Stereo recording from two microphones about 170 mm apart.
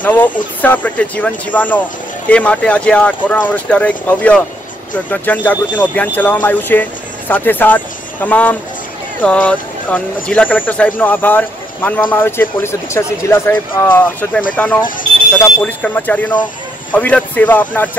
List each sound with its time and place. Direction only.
0.0 s speech: 10° left (ahead or behind)